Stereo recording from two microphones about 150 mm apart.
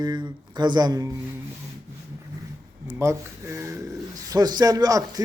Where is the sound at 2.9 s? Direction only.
20° right (ahead or behind).